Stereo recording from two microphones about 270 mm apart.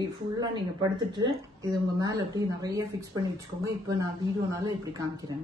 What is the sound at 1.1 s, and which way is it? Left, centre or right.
Speech, centre.